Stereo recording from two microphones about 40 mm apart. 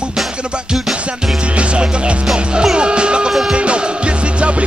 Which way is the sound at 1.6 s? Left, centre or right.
Right.